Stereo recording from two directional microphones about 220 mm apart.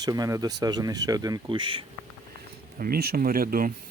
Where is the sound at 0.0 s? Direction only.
15° right (ahead or behind).